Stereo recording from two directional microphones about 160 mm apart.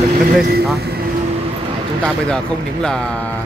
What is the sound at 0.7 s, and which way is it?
Speech, 80° right.